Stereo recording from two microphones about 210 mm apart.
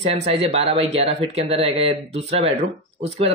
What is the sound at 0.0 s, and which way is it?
Speech, 30° right (ahead or behind).